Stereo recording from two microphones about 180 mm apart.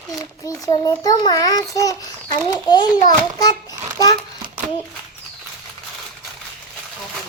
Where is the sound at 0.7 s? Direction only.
20° left (ahead or behind).